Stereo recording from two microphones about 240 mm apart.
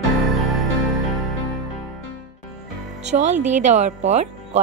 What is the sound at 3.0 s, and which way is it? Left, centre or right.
Speech, right.